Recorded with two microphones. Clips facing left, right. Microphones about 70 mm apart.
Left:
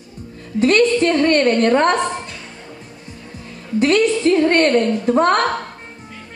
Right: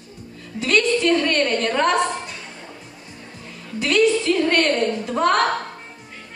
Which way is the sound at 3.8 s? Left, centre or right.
Left.